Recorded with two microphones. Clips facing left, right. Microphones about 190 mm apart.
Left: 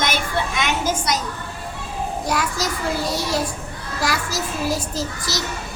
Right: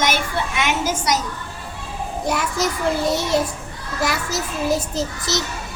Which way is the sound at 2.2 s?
25° right (ahead or behind).